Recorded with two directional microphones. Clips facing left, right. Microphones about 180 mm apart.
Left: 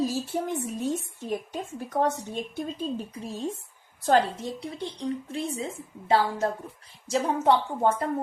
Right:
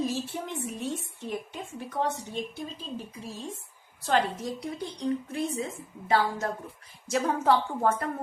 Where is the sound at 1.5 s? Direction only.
40° left (ahead or behind).